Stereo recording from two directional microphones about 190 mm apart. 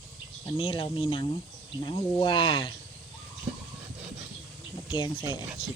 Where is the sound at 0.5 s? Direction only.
25° left (ahead or behind).